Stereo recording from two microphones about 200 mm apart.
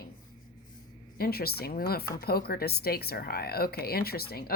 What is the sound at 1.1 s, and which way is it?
Speech, 50° left (ahead or behind).